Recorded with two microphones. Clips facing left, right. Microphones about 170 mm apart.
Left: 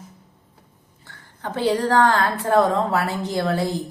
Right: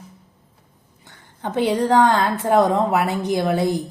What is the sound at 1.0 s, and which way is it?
A woman's voice, 20° right (ahead or behind).